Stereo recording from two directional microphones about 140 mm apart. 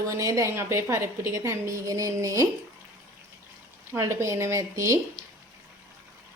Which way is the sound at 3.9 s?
20° right (ahead or behind).